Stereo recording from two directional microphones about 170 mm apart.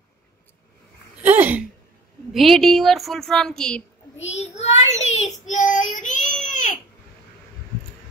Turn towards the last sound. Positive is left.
turn(degrees=50)  # may be behind; listen again after turning